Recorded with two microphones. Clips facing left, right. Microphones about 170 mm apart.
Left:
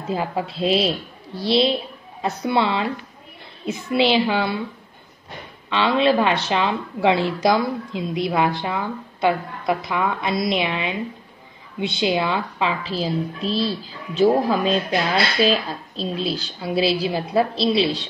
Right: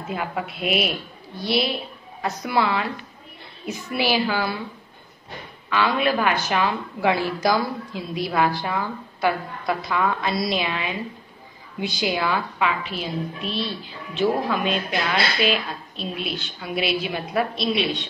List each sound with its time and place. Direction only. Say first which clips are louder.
0.1 s a woman's voice: left 4 dB; 30° left (ahead or behind)
5.7 s a woman's voice: left 3 dB; 25° left (ahead or behind)